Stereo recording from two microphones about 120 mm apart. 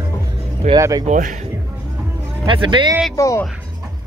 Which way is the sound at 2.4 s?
40° right (ahead or behind).